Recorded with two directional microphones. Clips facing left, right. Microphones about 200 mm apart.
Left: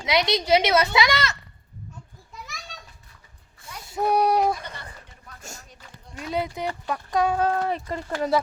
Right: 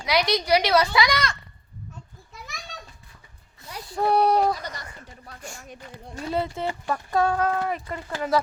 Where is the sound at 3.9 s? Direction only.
15° left (ahead or behind).